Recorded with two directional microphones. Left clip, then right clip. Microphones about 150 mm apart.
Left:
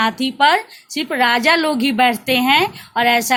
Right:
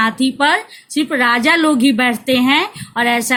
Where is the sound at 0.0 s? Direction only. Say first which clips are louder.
Even; 45° left (ahead or behind).